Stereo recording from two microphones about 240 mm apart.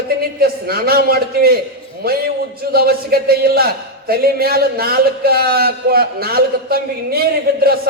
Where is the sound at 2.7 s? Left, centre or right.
Right.